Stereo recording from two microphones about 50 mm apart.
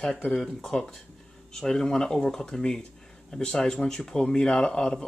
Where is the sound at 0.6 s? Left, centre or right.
Centre.